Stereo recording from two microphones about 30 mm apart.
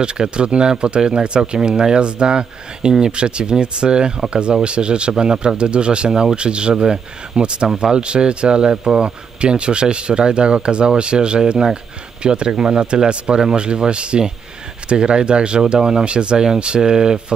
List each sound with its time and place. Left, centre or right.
0.0 s speech: right
6.7 s speech: right
7.3 s speech: right
7.6 s speech: centre
7.9 s speech: right